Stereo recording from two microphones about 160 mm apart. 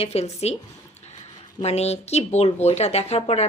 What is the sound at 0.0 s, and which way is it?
Speech, 40° left (ahead or behind).